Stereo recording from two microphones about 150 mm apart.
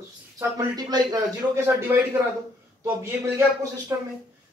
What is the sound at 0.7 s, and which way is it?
A man's voice, 25° right (ahead or behind).